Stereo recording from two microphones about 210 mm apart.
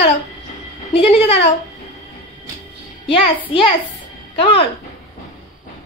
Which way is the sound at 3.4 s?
25° left (ahead or behind).